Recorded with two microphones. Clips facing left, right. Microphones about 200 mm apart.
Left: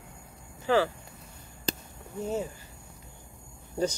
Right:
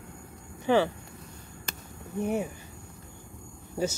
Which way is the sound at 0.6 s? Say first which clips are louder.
Right 1 dB; 20° right (ahead or behind).